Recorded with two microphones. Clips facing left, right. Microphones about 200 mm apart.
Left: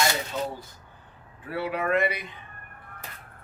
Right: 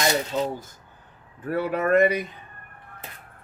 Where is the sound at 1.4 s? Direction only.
45° right (ahead or behind).